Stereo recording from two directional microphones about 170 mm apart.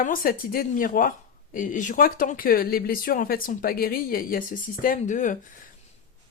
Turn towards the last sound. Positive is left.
turn(degrees=50)  # may be behind; listen again after turning